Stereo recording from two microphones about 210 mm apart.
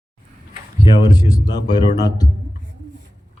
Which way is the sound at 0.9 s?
20° left (ahead or behind).